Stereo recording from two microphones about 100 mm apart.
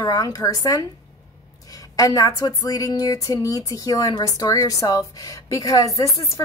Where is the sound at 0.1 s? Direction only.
40° left (ahead or behind).